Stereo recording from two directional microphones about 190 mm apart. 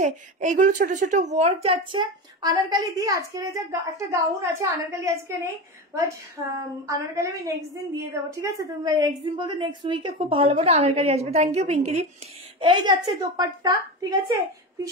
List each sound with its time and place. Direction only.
0.0 s a woman's voice: 40° right (ahead or behind); by 6.4 s 15° right (ahead or behind)
7.4 s a woman's voice: 15° right (ahead or behind)